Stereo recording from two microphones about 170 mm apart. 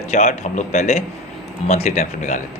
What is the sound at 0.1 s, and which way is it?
A man's voice, 40° left (ahead or behind).